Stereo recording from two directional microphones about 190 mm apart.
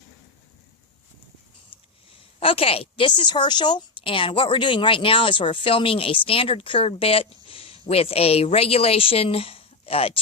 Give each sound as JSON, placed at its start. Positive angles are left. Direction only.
{"t": 1.7, "sound": "sniff", "side_deg": 30}
{"t": 2.4, "sound": "a woman's voice", "side_deg": 30}